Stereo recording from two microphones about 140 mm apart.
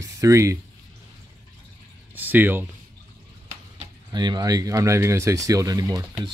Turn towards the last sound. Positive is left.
turn(degrees=-25)  # may be behind; listen again after turning